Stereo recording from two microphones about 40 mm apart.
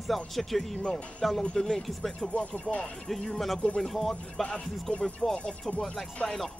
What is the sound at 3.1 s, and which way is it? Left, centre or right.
Music, centre.